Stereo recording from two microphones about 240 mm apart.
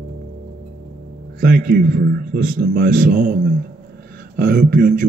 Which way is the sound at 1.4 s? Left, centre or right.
Right.